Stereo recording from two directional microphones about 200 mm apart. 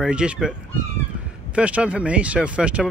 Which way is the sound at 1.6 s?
5° right (ahead or behind).